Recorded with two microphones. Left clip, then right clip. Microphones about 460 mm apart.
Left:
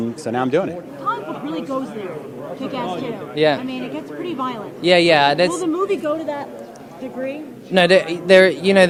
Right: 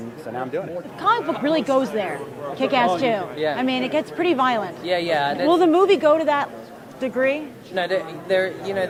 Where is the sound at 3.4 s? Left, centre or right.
Left.